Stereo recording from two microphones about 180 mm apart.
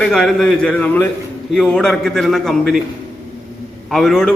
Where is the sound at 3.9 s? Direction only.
Centre (ahead or behind).